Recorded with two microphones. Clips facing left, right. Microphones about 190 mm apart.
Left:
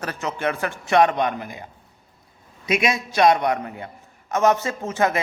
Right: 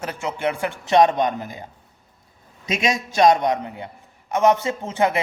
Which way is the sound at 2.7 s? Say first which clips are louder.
Left 1 dB; 25° right (ahead or behind).